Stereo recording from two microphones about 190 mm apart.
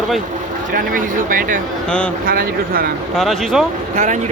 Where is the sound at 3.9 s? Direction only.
40° right (ahead or behind).